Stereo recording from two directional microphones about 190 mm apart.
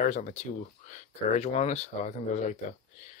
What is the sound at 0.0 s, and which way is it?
Speech, 40° left (ahead or behind).